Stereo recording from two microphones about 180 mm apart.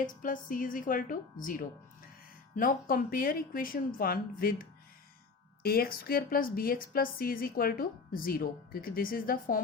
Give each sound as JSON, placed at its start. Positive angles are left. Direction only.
{"t": 0.0, "sound": "a woman's voice", "side_deg": 50}
{"t": 5.6, "sound": "a woman's voice", "side_deg": 55}